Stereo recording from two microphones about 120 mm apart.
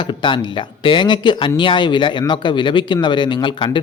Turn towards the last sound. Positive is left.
turn(degrees=40)  # may be behind; listen again after turning